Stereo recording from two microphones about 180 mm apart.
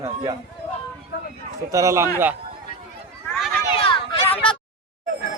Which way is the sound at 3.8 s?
30° left (ahead or behind).